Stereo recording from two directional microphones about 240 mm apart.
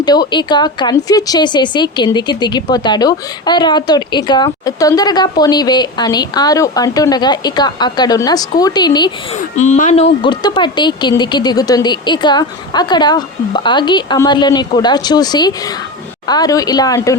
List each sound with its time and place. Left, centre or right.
0.0 s a woman's voice: centre
9.6 s a woman's voice: left; by 17.2 s centre